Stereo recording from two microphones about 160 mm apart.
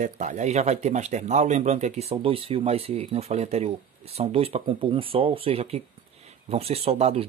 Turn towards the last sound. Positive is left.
turn(degrees=-40)  # may be behind; listen again after turning